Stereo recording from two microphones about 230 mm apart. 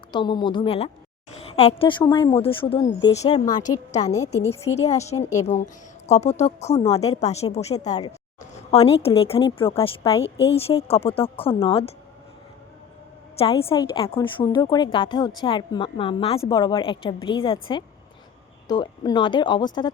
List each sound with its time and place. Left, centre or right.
0.1 s speech: centre
4.9 s speech: left
13.4 s speech: left